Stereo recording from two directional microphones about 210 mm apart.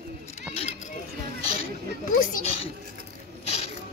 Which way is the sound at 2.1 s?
40° left (ahead or behind).